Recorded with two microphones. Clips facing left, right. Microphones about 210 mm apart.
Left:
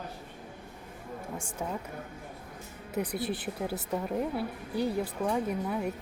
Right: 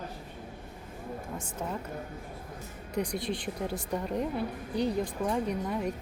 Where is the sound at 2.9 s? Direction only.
5° left (ahead or behind).